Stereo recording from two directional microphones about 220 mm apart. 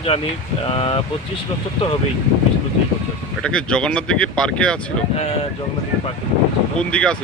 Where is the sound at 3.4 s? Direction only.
5° left (ahead or behind).